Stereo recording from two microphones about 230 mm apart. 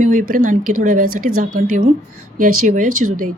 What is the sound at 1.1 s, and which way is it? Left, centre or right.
Speech, right.